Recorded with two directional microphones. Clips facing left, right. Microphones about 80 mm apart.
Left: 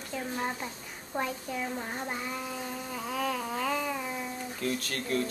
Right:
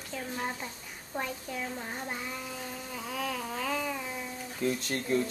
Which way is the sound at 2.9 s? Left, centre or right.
Centre.